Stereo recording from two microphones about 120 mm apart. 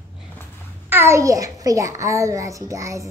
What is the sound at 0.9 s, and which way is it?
A child's voice, 20° right (ahead or behind).